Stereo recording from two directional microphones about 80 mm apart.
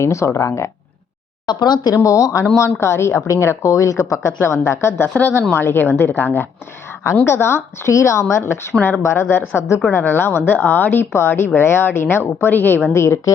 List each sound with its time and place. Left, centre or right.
0.0 s a woman's voice: left
1.5 s speech: left
2.0 s a woman's voice: left
5.0 s a woman's voice: centre; by 13.3 s left